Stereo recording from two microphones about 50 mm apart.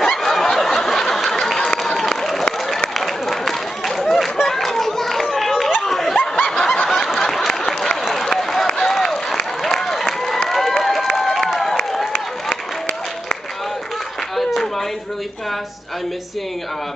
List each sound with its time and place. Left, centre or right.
0.0 s snicker: centre
3.0 s run: centre
5.9 s snicker: centre
6.3 s snicker: centre
7.2 s applause: centre
11.6 s a sound: centre
14.3 s a sound: centre